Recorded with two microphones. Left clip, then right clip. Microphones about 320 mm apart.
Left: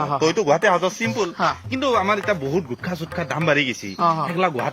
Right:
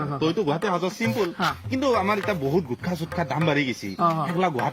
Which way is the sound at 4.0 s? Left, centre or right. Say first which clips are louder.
Left 3 dB; centre.